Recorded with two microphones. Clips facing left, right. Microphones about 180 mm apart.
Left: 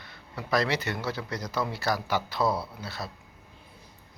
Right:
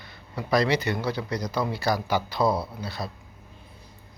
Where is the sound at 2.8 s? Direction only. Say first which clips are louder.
Right 4 dB; centre (ahead or behind).